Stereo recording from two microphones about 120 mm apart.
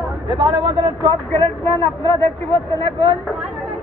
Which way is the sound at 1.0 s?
25° left (ahead or behind).